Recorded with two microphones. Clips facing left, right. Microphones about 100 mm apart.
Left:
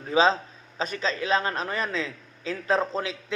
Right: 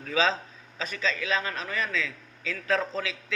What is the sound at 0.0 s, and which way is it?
A man's voice, 30° left (ahead or behind).